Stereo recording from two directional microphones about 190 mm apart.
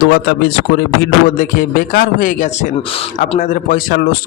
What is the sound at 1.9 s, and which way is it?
Speech, 50° left (ahead or behind).